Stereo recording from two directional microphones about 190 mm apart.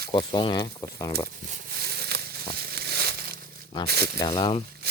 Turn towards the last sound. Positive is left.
turn(degrees=25)  # may be behind; listen again after turning